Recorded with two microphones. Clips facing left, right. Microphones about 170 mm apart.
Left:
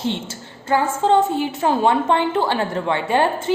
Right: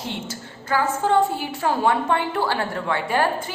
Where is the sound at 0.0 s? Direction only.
25° left (ahead or behind).